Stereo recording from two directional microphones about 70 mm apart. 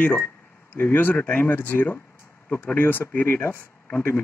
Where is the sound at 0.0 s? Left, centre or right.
Left.